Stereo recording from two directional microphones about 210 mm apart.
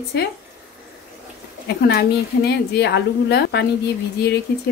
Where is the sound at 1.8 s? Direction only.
50° left (ahead or behind).